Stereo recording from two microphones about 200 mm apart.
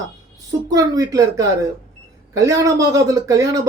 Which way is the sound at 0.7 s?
15° right (ahead or behind).